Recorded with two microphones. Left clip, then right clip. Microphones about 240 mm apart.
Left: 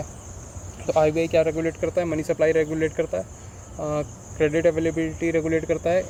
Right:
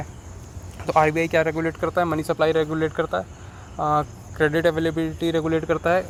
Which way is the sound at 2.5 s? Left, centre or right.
Right.